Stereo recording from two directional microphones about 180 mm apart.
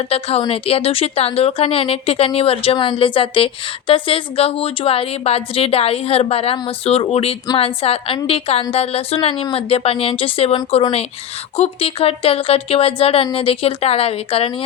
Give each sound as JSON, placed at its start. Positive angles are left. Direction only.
{"t": 0.1, "sound": "a woman's voice", "side_deg": 35}